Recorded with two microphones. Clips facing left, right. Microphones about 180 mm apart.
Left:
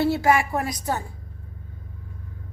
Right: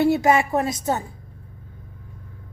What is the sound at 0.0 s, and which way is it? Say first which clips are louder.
A woman's voice: right 2 dB; 20° right (ahead or behind).